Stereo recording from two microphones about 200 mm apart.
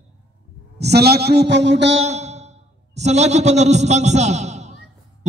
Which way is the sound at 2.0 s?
35° right (ahead or behind).